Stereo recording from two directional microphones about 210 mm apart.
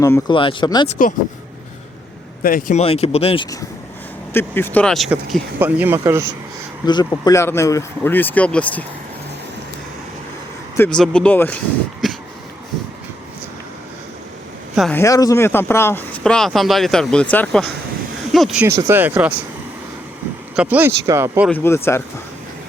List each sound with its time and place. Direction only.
0.0 s speech: 20° left (ahead or behind)
2.4 s speech: 40° left (ahead or behind)
2.8 s speech: 30° left (ahead or behind)
4.4 s speech: 10° left (ahead or behind); by 6.3 s 15° right (ahead or behind)
6.8 s speech: 20° left (ahead or behind)
10.8 s speech: 5° left (ahead or behind)
14.8 s speech: 5° left (ahead or behind); by 19.3 s 10° right (ahead or behind)
20.6 s speech: 10° right (ahead or behind)
21.5 s speech: 10° left (ahead or behind)